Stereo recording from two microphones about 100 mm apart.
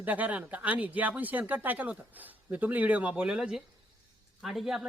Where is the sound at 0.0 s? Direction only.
15° right (ahead or behind).